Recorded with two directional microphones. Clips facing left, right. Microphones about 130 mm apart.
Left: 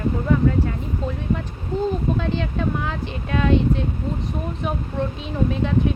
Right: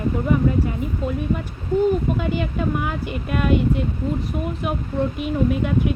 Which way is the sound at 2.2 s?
10° right (ahead or behind).